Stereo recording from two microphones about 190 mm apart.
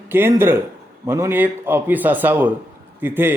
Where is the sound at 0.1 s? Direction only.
10° right (ahead or behind).